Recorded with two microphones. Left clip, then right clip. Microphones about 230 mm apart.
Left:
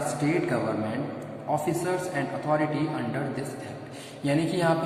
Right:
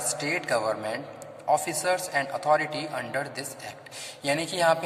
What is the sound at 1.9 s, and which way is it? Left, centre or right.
Speech, right.